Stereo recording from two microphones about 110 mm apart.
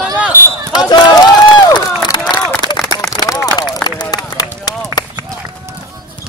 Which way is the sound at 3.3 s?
25° left (ahead or behind).